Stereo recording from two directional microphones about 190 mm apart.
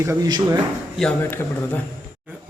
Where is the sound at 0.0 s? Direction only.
15° right (ahead or behind).